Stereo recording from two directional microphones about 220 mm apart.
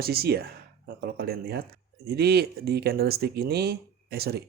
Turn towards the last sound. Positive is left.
turn(degrees=-45)  # may be behind; listen again after turning